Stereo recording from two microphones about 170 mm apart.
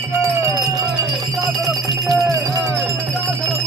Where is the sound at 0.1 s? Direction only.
15° right (ahead or behind).